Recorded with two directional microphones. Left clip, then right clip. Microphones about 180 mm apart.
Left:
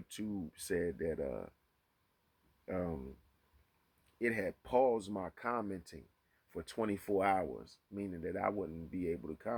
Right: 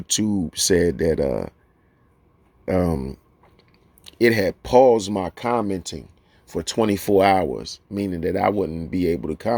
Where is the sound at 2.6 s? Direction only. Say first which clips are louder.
Right 18 dB; 45° right (ahead or behind).